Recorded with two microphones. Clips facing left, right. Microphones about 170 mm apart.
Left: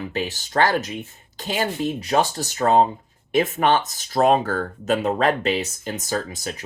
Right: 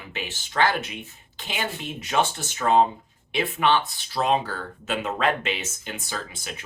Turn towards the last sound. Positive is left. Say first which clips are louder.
# left 8 dB
turn(degrees=40)  # may be behind; listen again after turning